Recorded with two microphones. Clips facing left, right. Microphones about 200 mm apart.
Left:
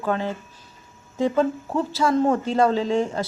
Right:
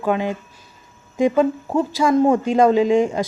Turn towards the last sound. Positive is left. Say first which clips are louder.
# right 6 dB
turn(degrees=-15)  # may be behind; listen again after turning